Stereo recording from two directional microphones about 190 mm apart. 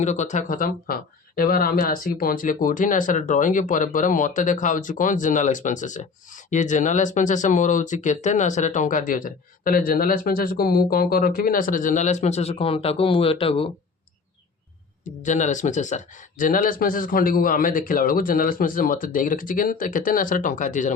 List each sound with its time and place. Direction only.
0.0 s speech: 40° left (ahead or behind)
15.2 s speech: 40° left (ahead or behind)